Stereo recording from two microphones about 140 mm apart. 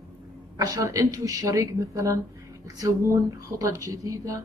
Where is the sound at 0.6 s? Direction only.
25° right (ahead or behind).